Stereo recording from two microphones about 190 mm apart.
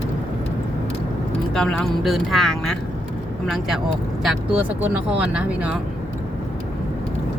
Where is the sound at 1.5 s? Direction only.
Centre (ahead or behind).